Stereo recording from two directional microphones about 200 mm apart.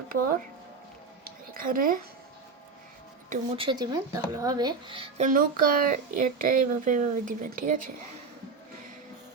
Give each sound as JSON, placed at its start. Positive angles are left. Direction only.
{"t": 1.6, "sound": "speech", "side_deg": -45}
{"t": 3.2, "sound": "speech", "side_deg": -30}